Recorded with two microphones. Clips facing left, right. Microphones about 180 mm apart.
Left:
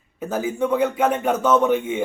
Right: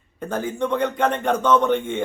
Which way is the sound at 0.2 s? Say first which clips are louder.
Left 2 dB; 5° left (ahead or behind).